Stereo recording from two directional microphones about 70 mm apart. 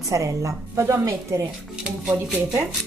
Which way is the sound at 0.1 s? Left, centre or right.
Right.